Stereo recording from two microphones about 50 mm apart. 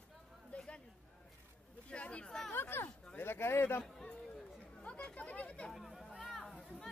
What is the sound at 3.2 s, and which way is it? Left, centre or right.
Bird, left.